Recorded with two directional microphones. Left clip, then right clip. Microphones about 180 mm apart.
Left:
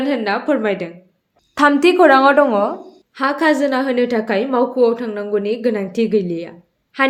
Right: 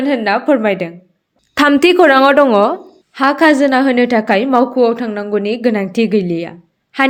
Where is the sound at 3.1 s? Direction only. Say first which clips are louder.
Right 5 dB; 40° right (ahead or behind).